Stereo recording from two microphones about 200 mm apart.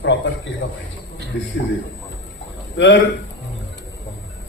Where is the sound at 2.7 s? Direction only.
65° left (ahead or behind).